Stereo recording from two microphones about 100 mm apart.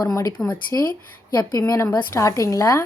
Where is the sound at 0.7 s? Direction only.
30° left (ahead or behind).